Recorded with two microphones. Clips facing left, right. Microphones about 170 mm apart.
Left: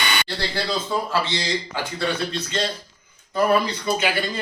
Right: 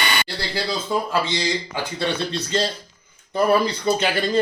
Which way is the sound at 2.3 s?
35° right (ahead or behind).